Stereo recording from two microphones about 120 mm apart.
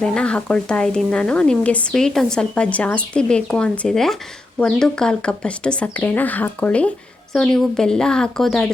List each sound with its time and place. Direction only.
0.0 s speech: 5° left (ahead or behind)